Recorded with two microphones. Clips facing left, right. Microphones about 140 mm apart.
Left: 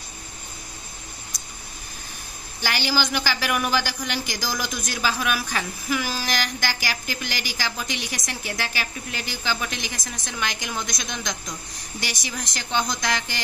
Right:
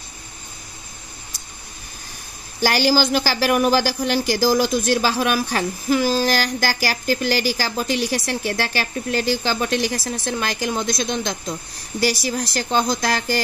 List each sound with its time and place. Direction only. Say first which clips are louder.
2.6 s a woman's voice: right 8 dB; 40° right (ahead or behind)